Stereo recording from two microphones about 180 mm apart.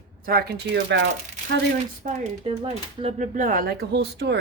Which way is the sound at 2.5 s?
35° right (ahead or behind).